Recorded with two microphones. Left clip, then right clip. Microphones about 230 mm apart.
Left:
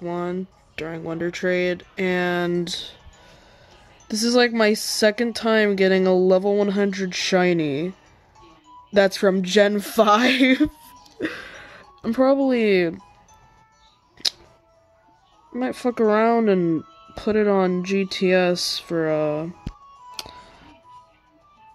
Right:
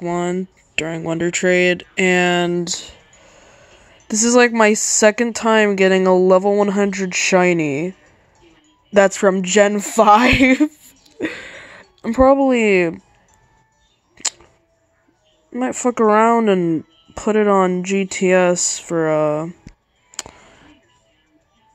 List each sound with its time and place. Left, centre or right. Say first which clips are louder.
0.0 s speech: right 6 dB; right
2.8 s a sound: even; centre
5.0 s speech: right 5 dB; centre
8.9 s speech: right 4 dB; centre
15.5 s speech: right 5 dB; centre